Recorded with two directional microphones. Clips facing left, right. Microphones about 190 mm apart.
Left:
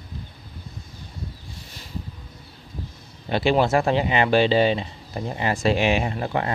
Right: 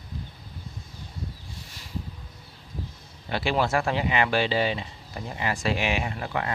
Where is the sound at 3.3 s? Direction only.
20° left (ahead or behind).